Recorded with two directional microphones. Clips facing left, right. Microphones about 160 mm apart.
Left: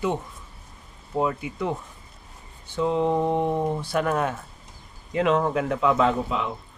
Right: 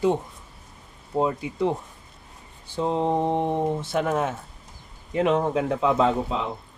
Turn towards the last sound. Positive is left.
turn(degrees=-30)  # may be behind; listen again after turning